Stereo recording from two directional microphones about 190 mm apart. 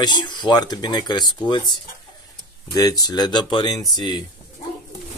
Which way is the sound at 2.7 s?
20° left (ahead or behind).